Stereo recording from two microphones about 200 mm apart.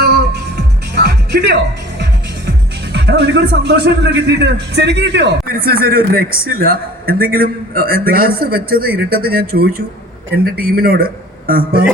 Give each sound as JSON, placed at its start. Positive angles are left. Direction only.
{"t": 0.0, "sound": "music", "side_deg": -55}
{"t": 2.9, "sound": "a man's voice", "side_deg": -60}